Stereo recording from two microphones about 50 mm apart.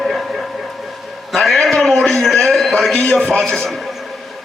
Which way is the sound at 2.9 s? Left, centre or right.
Centre.